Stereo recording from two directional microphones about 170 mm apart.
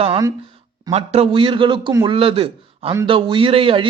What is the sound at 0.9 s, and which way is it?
A man's voice, 35° right (ahead or behind).